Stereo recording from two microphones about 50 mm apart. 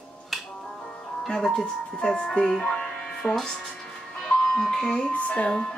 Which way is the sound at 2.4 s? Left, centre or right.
Centre.